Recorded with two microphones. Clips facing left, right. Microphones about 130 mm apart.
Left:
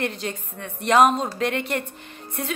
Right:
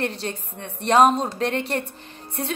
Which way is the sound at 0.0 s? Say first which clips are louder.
Right 1 dB; 35° right (ahead or behind).